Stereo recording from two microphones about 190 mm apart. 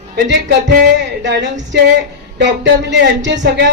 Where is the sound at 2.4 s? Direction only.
65° right (ahead or behind).